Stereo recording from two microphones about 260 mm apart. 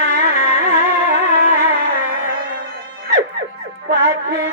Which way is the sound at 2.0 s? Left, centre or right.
Right.